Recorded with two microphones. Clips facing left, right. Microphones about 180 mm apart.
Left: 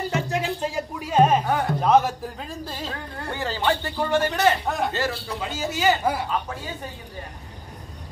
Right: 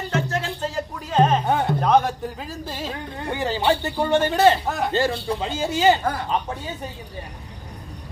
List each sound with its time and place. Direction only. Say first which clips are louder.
0.1 s music: even; 15° left (ahead or behind)
1.4 s music: right 2 dB; 25° right (ahead or behind)
1.8 s speech: left 3 dB; 5° left (ahead or behind)
3.2 s speech: right 4 dB; 20° right (ahead or behind)
4.1 s speech: right 4 dB; 25° right (ahead or behind)
4.6 s speech: even; centre (ahead or behind)
4.9 s speech: right 5 dB; 30° right (ahead or behind)